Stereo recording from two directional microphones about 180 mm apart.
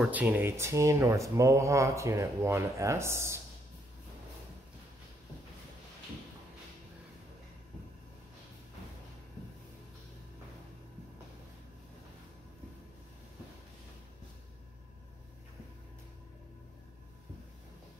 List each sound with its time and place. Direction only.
0.0 s speech: 10° right (ahead or behind)